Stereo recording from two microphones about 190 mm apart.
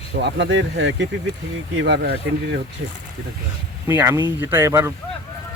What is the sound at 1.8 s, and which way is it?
Speech, 60° right (ahead or behind).